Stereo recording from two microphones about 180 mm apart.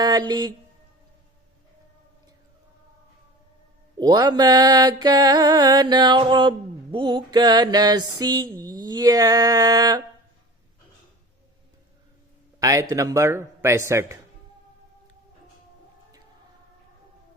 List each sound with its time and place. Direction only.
0.0 s speech: 20° right (ahead or behind)
3.9 s mantra: 25° right (ahead or behind)
12.5 s a man's voice: 20° right (ahead or behind)